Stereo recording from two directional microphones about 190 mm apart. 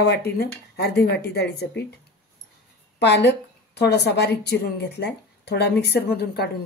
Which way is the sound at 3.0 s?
65° left (ahead or behind).